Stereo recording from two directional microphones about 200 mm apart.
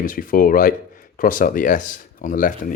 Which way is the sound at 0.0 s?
45° left (ahead or behind).